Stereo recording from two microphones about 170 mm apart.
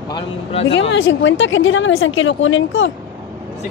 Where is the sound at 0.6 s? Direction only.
90° left.